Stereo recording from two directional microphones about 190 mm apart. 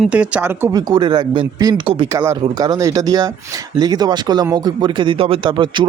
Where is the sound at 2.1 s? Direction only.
15° right (ahead or behind).